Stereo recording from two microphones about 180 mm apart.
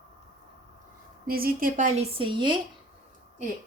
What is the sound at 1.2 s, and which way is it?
A woman's voice, 55° right (ahead or behind).